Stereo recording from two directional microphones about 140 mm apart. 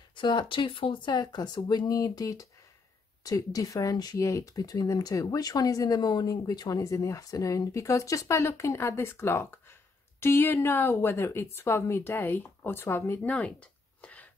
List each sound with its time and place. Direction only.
0.1 s a woman's voice: 35° left (ahead or behind); by 14.3 s 10° left (ahead or behind)